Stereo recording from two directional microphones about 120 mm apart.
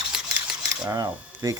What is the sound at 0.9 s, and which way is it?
Speech, 30° right (ahead or behind).